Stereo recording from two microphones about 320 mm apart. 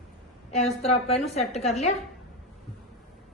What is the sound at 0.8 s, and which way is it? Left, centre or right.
Speech, centre.